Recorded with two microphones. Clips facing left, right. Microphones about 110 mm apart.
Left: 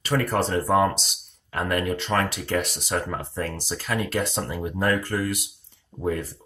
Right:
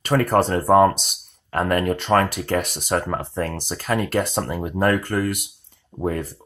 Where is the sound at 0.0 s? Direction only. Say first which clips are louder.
Right 5 dB; 55° right (ahead or behind).